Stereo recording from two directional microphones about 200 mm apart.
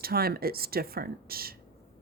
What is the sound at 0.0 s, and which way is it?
Speech, 50° right (ahead or behind).